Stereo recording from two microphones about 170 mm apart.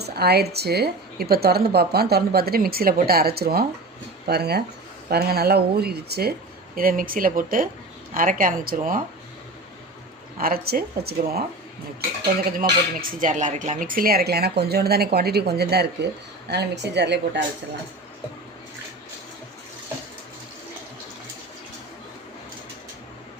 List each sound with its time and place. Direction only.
0.0 s speech: 70° right (ahead or behind)
6.7 s speech: 55° right (ahead or behind)
10.3 s speech: 60° right (ahead or behind)
12.5 s speech: 60° right (ahead or behind)
16.5 s a woman's voice: 80° right